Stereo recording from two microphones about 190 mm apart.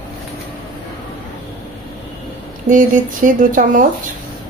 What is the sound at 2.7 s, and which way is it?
A woman's voice, 45° right (ahead or behind).